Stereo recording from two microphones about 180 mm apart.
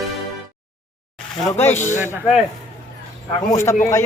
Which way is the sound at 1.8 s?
45° left (ahead or behind).